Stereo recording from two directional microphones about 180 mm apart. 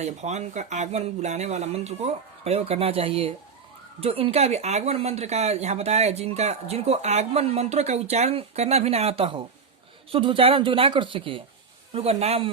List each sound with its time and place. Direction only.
0.0 s speech: 40° right (ahead or behind)